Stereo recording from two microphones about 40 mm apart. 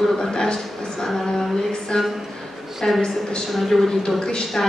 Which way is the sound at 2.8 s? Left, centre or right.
Centre.